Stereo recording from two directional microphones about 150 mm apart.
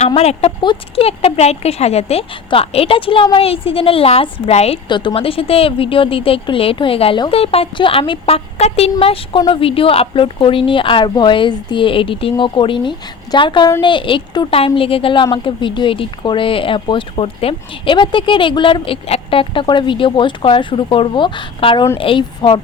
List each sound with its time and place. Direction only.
0.1 s a woman's voice: 45° left (ahead or behind)
4.9 s a woman's voice: 30° left (ahead or behind)